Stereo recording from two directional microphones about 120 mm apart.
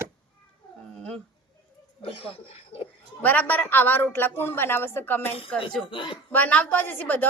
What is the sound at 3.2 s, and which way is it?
Speech, 15° left (ahead or behind).